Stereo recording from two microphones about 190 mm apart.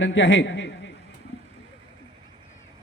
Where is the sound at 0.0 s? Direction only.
80° left.